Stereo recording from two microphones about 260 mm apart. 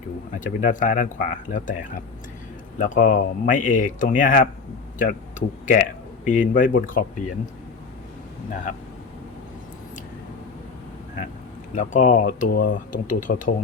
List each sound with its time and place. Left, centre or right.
0.3 s speech: left
11.7 s speech: left